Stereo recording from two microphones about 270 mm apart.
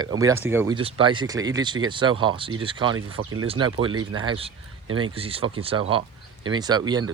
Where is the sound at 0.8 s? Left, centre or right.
Centre.